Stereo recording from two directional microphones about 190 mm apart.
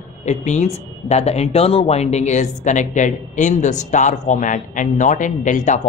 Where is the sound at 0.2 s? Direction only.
35° left (ahead or behind).